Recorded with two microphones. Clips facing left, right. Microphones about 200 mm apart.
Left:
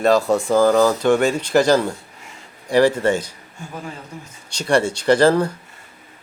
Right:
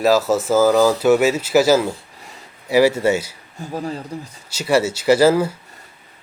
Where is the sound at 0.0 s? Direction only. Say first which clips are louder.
Even; 5° right (ahead or behind).